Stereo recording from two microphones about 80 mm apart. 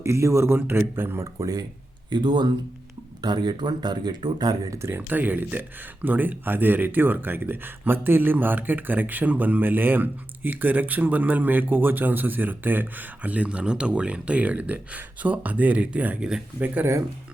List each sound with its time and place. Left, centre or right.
0.0 s speech: right
1.4 s speech: right
2.0 s speech: right
4.8 s speech: right